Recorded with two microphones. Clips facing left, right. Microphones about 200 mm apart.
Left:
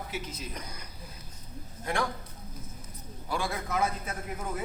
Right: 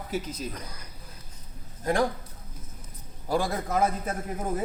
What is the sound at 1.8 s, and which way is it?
Speech, 40° right (ahead or behind).